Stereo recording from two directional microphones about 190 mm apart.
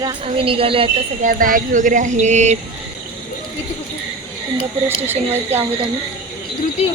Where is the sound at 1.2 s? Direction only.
45° right (ahead or behind).